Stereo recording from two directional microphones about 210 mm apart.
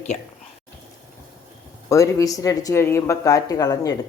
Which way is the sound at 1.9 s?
15° left (ahead or behind).